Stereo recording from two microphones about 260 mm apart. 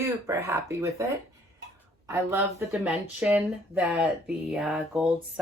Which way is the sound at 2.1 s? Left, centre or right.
Centre.